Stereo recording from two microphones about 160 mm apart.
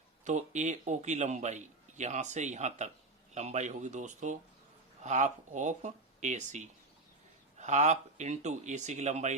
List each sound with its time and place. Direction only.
0.3 s a man's voice: 50° right (ahead or behind)